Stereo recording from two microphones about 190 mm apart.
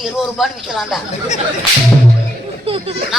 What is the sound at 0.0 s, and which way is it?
Speech, centre (ahead or behind).